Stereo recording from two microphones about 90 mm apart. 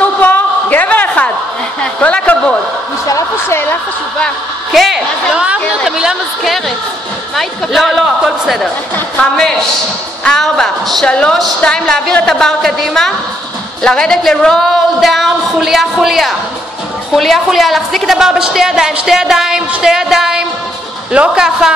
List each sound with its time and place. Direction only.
0.2 s a sound: 20° left (ahead or behind)
2.0 s speech: 15° left (ahead or behind)
3.1 s a woman's voice: 30° left (ahead or behind)
4.7 s a woman's voice: 5° right (ahead or behind)
8.9 s a woman's voice: 10° left (ahead or behind); by 21.7 s 10° right (ahead or behind)